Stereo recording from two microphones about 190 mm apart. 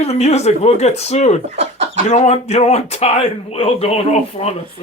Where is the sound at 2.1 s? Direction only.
35° left (ahead or behind).